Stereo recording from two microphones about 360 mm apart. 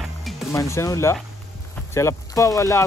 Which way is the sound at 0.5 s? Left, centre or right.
Centre.